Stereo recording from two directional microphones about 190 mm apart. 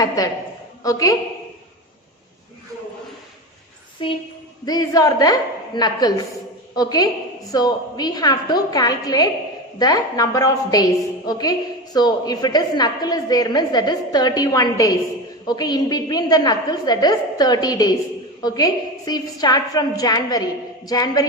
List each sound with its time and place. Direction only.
0.2 s a woman's voice: 20° left (ahead or behind)
4.0 s a woman's voice: 25° left (ahead or behind)